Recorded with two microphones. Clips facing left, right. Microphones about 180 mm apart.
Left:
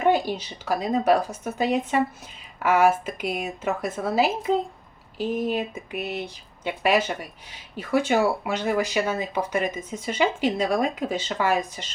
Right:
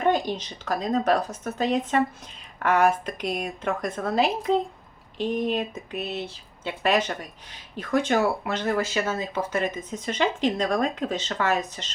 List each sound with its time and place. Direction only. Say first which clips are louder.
0.0 s speech: left 2 dB; 10° left (ahead or behind)